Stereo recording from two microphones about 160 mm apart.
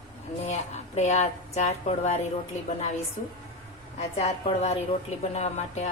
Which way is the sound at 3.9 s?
40° left (ahead or behind).